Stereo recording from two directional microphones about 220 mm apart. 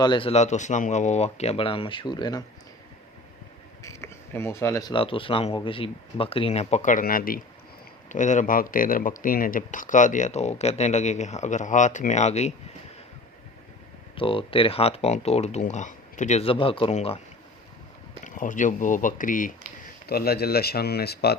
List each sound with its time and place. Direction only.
0.0 s speech: 20° left (ahead or behind)
3.8 s speech: 10° left (ahead or behind); by 12.5 s 30° left (ahead or behind)
14.2 s speech: 25° left (ahead or behind)
18.2 s speech: 35° left (ahead or behind)